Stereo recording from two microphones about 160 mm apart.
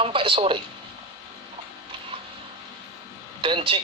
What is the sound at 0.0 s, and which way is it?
Speech, 35° right (ahead or behind).